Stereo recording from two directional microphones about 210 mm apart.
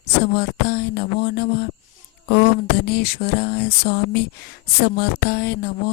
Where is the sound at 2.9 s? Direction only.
50° left (ahead or behind).